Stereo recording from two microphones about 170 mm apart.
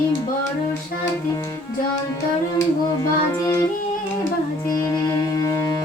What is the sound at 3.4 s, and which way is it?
Music, 20° left (ahead or behind).